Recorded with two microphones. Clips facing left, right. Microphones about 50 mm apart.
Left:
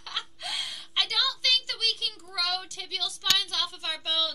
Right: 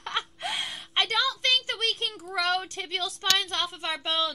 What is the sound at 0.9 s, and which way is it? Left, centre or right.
Speech, right.